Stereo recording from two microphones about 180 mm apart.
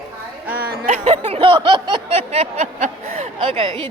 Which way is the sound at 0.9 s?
40° right (ahead or behind).